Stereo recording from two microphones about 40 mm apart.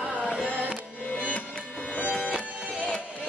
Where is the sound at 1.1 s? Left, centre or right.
Left.